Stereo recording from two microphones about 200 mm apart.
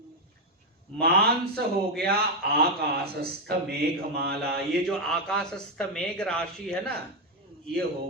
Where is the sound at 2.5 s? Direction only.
50° right (ahead or behind).